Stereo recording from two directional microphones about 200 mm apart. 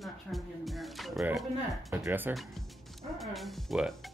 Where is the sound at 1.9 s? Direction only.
15° right (ahead or behind).